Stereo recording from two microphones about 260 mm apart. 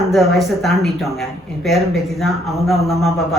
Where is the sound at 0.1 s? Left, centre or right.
Centre.